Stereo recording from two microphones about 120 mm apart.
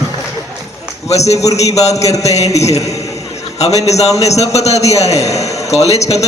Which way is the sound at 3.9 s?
65° left (ahead or behind).